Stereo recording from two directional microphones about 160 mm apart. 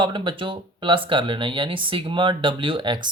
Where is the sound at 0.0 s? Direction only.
30° right (ahead or behind).